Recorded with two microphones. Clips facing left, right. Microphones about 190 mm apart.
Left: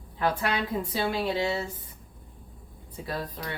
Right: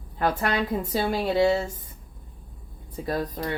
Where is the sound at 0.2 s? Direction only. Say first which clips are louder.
Right 3 dB; 45° right (ahead or behind).